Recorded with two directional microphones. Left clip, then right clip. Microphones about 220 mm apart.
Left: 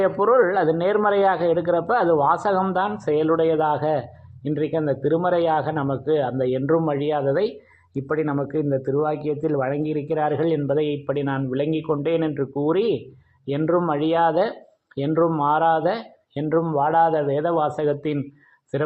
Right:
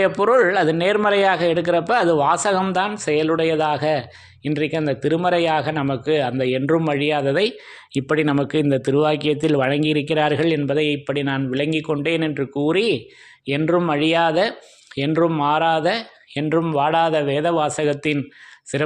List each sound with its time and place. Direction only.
0.0 s a man's voice: 30° right (ahead or behind)
8.0 s speech: 50° right (ahead or behind)
10.3 s a man's voice: 30° right (ahead or behind)
16.5 s speech: 45° right (ahead or behind)
16.7 s a man's voice: 30° right (ahead or behind)